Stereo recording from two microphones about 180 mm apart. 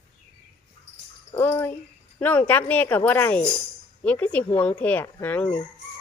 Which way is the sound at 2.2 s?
10° left (ahead or behind).